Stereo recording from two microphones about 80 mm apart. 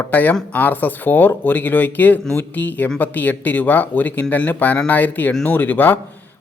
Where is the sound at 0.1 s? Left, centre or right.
Left.